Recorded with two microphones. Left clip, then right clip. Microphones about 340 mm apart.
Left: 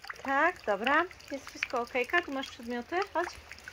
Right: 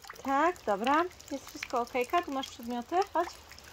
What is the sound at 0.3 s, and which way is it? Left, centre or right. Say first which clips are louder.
Speech: even; right.